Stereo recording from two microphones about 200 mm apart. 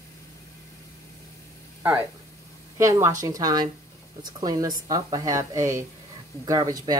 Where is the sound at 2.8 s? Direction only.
15° right (ahead or behind).